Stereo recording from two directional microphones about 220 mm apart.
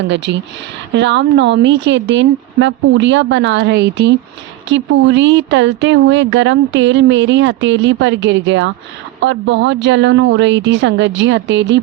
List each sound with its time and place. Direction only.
0.1 s speech: 55° right (ahead or behind)